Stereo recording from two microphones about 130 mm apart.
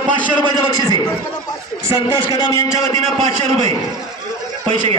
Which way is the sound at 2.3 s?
25° left (ahead or behind).